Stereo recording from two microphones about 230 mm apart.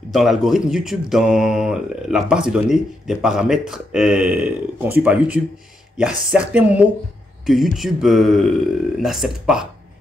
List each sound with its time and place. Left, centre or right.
0.1 s speech: centre